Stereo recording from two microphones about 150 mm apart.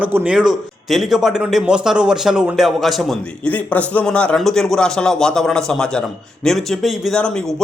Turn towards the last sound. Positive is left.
turn(degrees=5)  # may be behind; listen again after turning